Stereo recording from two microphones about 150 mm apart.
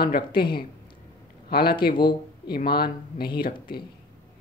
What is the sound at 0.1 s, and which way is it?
Speech, 80° left.